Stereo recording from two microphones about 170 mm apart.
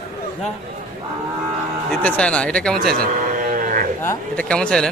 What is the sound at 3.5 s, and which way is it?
Livestock, 55° right (ahead or behind).